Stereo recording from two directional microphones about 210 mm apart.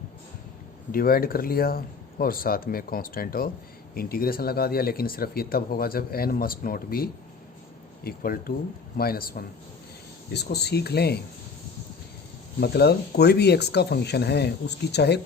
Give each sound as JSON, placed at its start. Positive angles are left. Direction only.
{"t": 0.9, "sound": "speech", "side_deg": 45}
{"t": 12.5, "sound": "speech", "side_deg": 50}